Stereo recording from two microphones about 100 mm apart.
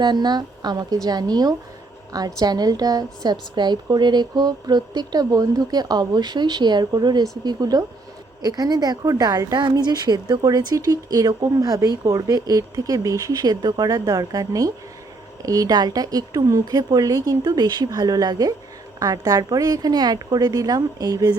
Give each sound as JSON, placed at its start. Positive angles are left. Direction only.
{"t": 0.0, "sound": "a woman's voice", "side_deg": -45}